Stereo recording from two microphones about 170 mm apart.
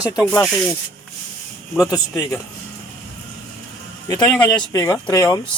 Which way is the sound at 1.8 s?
20° left (ahead or behind).